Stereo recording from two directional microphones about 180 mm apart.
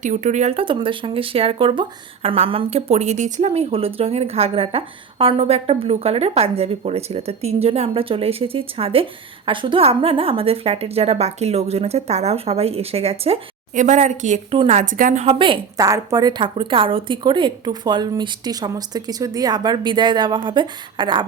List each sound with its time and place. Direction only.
0.0 s a woman's voice: 40° right (ahead or behind); by 21.2 s 25° right (ahead or behind)